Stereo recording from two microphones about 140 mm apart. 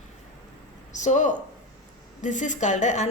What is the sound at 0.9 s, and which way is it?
A woman's voice, 60° left (ahead or behind).